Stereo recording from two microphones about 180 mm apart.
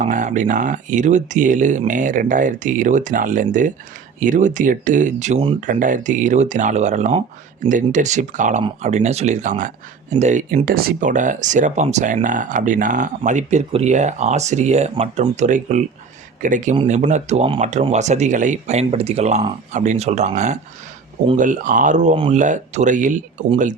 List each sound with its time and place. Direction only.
0.0 s speech: 45° right (ahead or behind)